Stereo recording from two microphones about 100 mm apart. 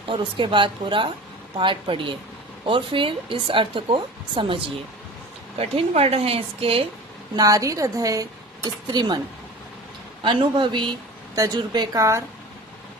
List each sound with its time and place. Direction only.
0.1 s speech: 55° right (ahead or behind)
5.5 s a woman's voice: 85° right
7.3 s speech: 35° right (ahead or behind)
10.2 s a man's voice: 55° right (ahead or behind)
11.9 s speech: 30° right (ahead or behind)